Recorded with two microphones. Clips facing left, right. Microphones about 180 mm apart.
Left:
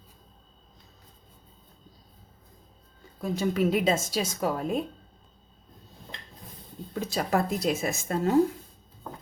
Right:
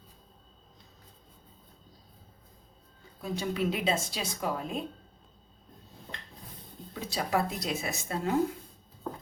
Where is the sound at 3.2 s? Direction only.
45° left (ahead or behind).